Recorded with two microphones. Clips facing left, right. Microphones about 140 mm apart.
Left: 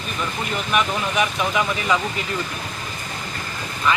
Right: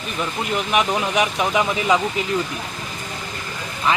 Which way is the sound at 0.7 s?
20° right (ahead or behind).